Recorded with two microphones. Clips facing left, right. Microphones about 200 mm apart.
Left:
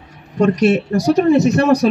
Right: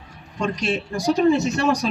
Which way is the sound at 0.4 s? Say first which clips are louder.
Left 10 dB; 65° left (ahead or behind).